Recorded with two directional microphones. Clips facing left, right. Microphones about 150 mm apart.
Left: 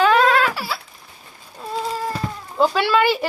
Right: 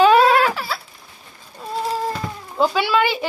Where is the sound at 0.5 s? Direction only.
5° left (ahead or behind).